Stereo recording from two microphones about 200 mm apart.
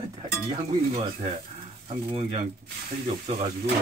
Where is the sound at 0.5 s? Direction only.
30° right (ahead or behind).